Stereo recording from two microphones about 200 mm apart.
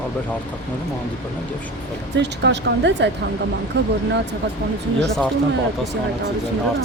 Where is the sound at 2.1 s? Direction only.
60° right (ahead or behind).